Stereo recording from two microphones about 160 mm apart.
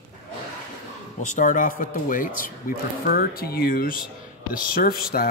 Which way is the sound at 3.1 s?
70° left (ahead or behind).